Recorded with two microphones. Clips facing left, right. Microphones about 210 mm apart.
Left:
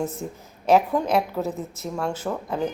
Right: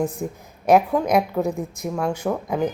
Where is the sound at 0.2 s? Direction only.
10° right (ahead or behind).